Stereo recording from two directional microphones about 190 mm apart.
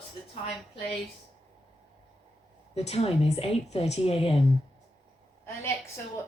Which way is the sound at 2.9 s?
35° left (ahead or behind).